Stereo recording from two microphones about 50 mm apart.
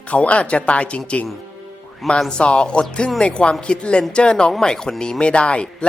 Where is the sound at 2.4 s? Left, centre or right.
Left.